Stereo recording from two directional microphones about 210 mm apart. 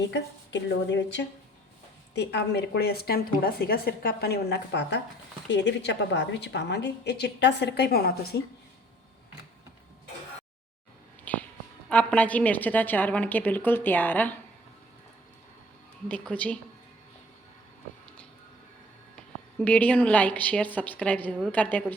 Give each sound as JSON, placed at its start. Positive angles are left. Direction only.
{"t": 0.1, "sound": "a woman's voice", "side_deg": 55}
{"t": 11.3, "sound": "a sound", "side_deg": 10}
{"t": 11.9, "sound": "a woman's voice", "side_deg": 5}
{"t": 16.0, "sound": "a woman's voice", "side_deg": 5}
{"t": 19.5, "sound": "a woman's voice", "side_deg": 5}